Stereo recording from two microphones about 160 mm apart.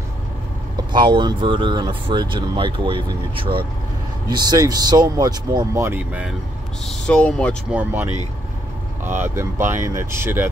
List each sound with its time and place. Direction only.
0.7 s speech: 25° right (ahead or behind)
5.9 s speech: 10° right (ahead or behind)
6.9 s speech: 5° left (ahead or behind)
7.7 s speech: 10° right (ahead or behind)
9.2 s speech: 15° right (ahead or behind)